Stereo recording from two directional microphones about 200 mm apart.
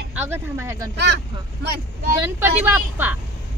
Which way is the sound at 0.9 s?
55° right (ahead or behind).